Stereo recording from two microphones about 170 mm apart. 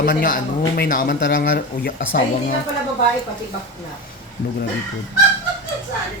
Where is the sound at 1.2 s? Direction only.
75° left (ahead or behind); by 2.5 s 55° left (ahead or behind).